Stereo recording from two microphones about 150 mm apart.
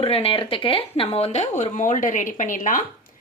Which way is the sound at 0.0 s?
40° left (ahead or behind).